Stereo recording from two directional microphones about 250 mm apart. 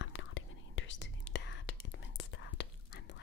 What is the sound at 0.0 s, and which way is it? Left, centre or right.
Whispering, left.